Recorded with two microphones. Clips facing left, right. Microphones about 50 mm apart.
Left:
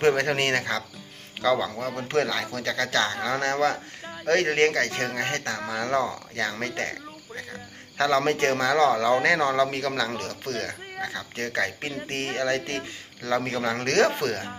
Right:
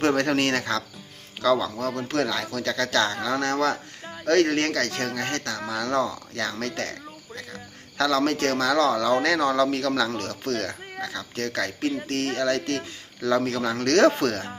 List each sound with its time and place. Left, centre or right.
0.0 s speech: centre
1.4 s speech: left
2.3 s speech: centre; by 9.7 s left
9.7 s speech: centre